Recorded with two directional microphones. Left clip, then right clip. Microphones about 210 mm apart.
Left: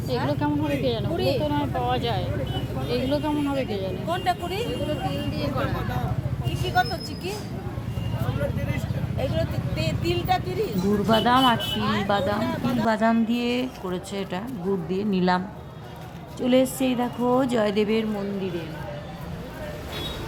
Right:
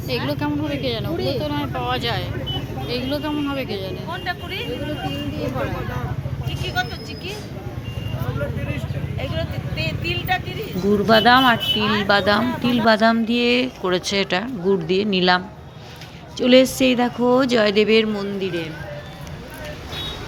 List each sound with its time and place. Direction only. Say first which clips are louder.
0.1 s speech: right 2 dB; 5° left (ahead or behind)
1.1 s speech: left 1 dB; 30° right (ahead or behind)
1.4 s speech: right 1 dB; 10° left (ahead or behind)
4.1 s speech: left 3 dB; 45° left (ahead or behind)
9.1 s speech: left 1 dB; 30° left (ahead or behind)
11.0 s speech: right 6 dB; 5° right (ahead or behind)
12.1 s speech: right 8 dB; 10° right (ahead or behind)
13.8 s speech: right 10 dB; 15° right (ahead or behind)
16.4 s speech: right 7 dB; 5° right (ahead or behind)